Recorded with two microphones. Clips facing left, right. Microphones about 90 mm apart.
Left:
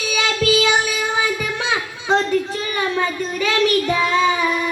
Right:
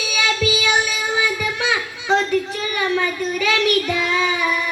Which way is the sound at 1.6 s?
35° left (ahead or behind).